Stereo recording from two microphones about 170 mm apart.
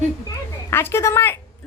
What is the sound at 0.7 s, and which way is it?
Speech, 15° left (ahead or behind).